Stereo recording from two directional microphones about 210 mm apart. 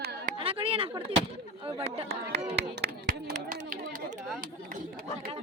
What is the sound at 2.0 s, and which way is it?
Speech, 50° right (ahead or behind).